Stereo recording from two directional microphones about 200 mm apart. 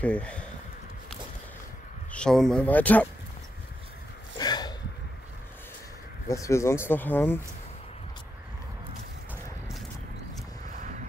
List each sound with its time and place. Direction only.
0.0 s speech: 5° left (ahead or behind)
2.1 s speech: 5° left (ahead or behind)
4.4 s a sound: 20° left (ahead or behind)
6.2 s speech: 15° left (ahead or behind)